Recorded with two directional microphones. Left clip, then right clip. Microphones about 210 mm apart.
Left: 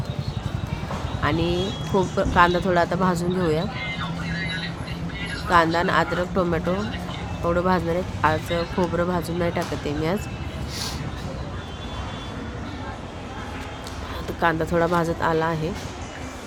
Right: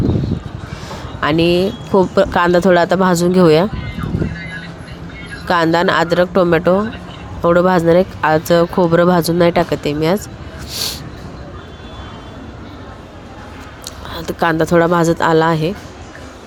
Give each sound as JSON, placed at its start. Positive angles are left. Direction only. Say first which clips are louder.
{"t": 1.2, "sound": "speech", "louder": "right 11 dB", "side_deg": -40}
{"t": 5.5, "sound": "speech", "louder": "right 6 dB", "side_deg": -40}
{"t": 14.2, "sound": "speech", "louder": "right 7 dB", "side_deg": -35}